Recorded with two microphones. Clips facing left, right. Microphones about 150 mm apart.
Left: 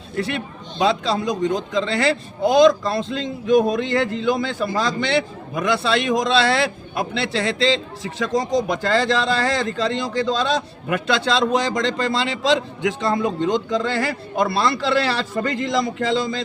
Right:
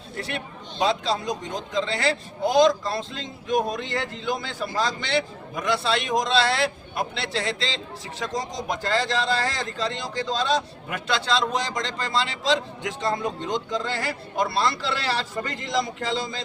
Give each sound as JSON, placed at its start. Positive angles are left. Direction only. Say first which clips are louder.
{"t": 0.8, "sound": "a man's voice", "louder": "left 4 dB", "side_deg": 70}